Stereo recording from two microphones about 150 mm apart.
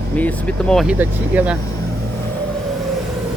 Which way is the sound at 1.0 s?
10° right (ahead or behind).